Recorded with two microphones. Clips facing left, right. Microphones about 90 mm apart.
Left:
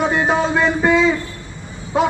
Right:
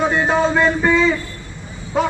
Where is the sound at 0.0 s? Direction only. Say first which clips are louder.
Right 1 dB; 10° left (ahead or behind).